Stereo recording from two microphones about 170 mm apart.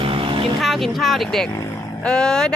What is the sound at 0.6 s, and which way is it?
Speech, centre (ahead or behind).